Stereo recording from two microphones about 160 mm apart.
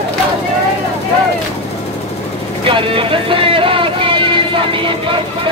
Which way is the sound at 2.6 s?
35° right (ahead or behind).